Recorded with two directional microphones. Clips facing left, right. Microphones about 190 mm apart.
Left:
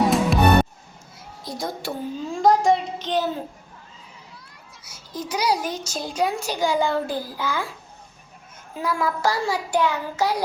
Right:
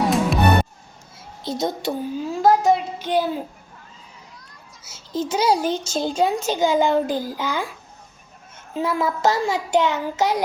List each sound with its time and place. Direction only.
0.0 s music: centre (ahead or behind)
1.5 s a child's voice: 25° right (ahead or behind)
2.2 s a child's voice: 5° right (ahead or behind)
4.8 s a child's voice: 25° right (ahead or behind)
8.7 s a child's voice: 25° right (ahead or behind)